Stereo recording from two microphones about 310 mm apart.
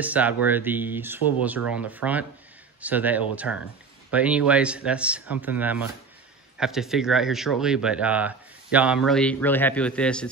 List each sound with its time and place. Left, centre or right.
0.0 s speech: centre